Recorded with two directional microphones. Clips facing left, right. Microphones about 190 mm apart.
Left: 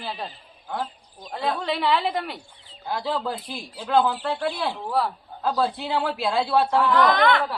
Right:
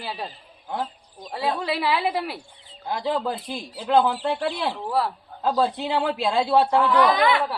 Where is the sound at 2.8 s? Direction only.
20° right (ahead or behind).